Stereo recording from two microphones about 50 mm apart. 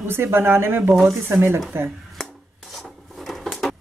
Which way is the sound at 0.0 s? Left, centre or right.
Right.